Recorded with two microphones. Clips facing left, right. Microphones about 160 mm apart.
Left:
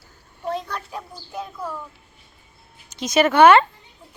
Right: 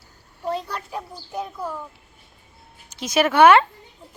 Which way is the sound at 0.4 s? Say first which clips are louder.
Even; 5° right (ahead or behind).